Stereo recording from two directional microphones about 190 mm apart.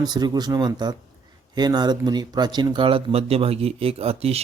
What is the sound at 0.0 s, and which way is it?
Speech, 20° right (ahead or behind).